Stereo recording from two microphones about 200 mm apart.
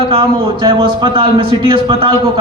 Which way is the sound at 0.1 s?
25° right (ahead or behind).